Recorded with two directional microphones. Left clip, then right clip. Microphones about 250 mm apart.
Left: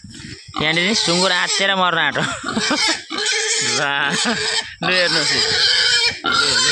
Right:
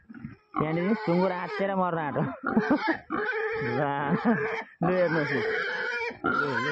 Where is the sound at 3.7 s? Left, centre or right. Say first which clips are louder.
Left 10 dB; centre.